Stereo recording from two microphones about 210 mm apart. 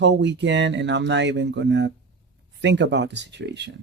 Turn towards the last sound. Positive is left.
turn(degrees=-55)  # may be behind; listen again after turning